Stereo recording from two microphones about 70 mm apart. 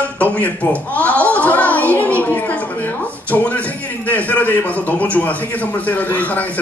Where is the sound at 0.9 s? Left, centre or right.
Left.